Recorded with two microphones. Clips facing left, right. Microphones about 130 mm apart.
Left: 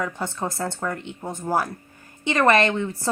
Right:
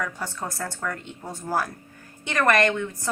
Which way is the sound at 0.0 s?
20° left (ahead or behind).